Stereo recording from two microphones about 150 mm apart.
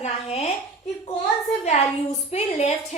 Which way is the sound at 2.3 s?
45° left (ahead or behind).